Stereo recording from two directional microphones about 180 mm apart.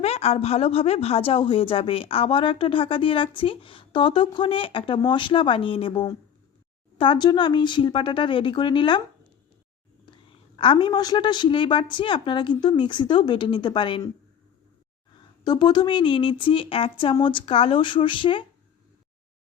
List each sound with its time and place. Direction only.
0.0 s a woman's voice: 35° left (ahead or behind)
10.6 s a woman's voice: 25° left (ahead or behind)
15.4 s a woman's voice: 25° left (ahead or behind)